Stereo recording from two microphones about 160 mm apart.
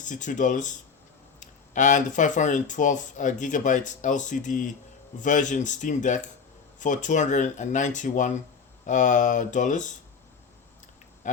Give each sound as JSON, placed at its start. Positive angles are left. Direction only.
{"t": 0.0, "sound": "speech", "side_deg": 50}